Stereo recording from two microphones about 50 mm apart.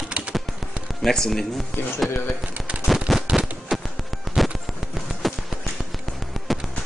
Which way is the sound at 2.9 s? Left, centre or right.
Centre.